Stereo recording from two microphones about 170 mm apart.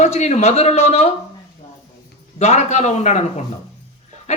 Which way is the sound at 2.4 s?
40° left (ahead or behind).